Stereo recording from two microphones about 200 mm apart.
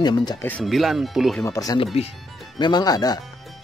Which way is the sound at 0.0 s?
20° left (ahead or behind).